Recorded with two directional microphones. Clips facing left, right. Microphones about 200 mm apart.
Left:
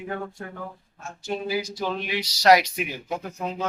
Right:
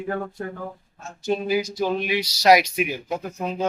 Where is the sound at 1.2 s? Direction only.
15° right (ahead or behind).